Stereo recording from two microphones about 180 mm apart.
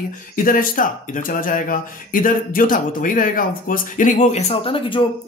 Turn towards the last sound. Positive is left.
turn(degrees=30)  # may be behind; listen again after turning